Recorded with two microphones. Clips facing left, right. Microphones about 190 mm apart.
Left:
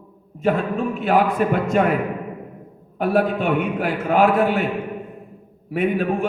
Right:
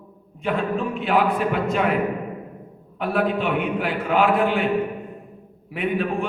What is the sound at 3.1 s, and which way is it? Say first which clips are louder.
A man's voice: left 3 dB; 45° left (ahead or behind).